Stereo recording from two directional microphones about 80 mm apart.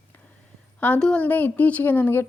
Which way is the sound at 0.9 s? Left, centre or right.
Centre.